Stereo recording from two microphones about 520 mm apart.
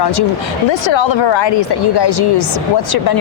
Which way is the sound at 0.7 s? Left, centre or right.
Left.